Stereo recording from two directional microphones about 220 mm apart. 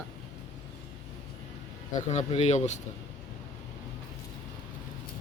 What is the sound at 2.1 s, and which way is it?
Speech, 30° left (ahead or behind).